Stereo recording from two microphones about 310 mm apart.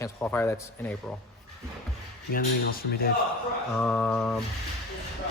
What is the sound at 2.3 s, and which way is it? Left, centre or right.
Speech, left.